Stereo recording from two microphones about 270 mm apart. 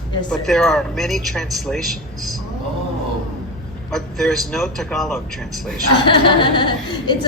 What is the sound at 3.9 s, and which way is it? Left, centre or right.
Speech, centre.